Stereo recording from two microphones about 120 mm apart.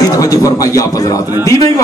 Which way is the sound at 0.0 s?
30° left (ahead or behind).